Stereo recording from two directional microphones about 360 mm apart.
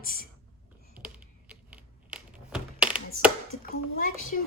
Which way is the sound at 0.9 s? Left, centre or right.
Centre.